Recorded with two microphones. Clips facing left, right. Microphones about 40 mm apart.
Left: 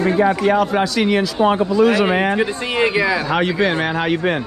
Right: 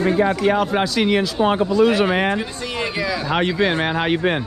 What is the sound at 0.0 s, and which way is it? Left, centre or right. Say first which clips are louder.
A man's voice: left 2 dB; left.